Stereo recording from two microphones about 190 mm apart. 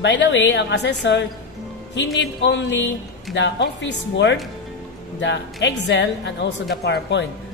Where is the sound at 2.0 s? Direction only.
70° left (ahead or behind).